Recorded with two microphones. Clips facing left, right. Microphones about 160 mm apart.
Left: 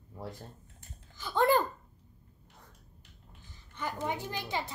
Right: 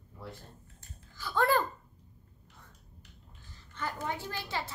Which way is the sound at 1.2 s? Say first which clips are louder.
Left 2 dB; 20° left (ahead or behind).